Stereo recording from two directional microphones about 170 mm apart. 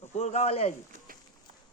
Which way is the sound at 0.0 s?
40° left (ahead or behind).